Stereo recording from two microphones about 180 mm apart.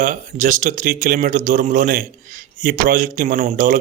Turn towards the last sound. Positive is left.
turn(degrees=-50)  # may be behind; listen again after turning